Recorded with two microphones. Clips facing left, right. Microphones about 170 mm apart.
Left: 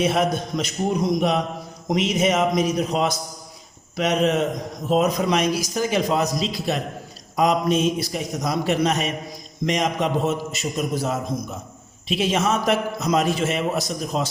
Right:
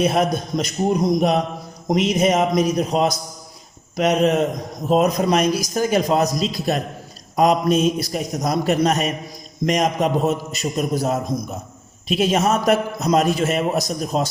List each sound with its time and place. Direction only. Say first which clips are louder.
0.0 s a man's voice: right 2 dB; 40° right (ahead or behind)